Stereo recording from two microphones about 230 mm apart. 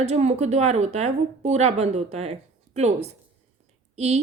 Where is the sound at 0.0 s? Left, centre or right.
Right.